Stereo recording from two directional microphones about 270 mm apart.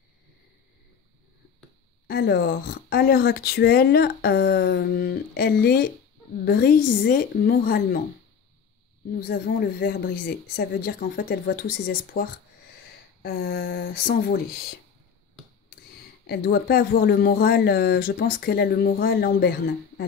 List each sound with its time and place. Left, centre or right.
2.0 s speech: left
9.3 s speech: left
15.7 s a sound: left
16.3 s speech: left